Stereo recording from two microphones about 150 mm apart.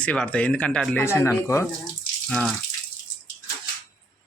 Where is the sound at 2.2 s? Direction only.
5° left (ahead or behind).